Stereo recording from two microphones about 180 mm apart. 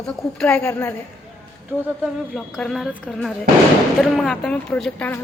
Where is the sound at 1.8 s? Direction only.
Centre (ahead or behind).